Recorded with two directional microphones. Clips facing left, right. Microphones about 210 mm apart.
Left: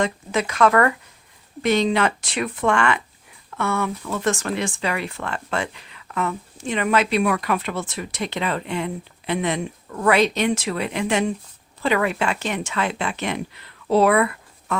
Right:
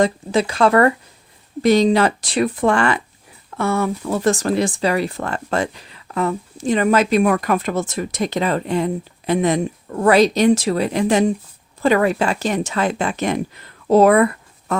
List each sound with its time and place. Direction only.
0.0 s a woman's voice: 30° right (ahead or behind)